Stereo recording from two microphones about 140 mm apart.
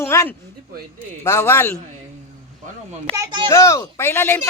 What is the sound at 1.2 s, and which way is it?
Speech, 15° left (ahead or behind).